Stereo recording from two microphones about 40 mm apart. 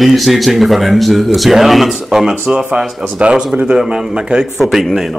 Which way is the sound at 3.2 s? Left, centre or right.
Right.